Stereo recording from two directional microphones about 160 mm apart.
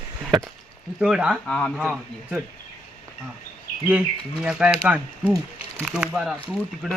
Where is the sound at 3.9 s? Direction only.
5° right (ahead or behind).